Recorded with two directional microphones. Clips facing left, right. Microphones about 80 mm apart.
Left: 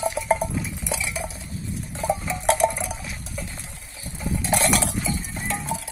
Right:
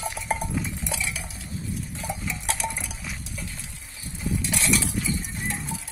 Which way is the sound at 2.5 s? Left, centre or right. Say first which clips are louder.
Left 12 dB; left.